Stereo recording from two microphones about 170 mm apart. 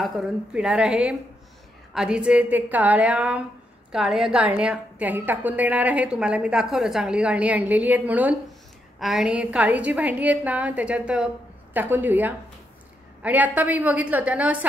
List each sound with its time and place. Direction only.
0.0 s a woman's voice: centre (ahead or behind)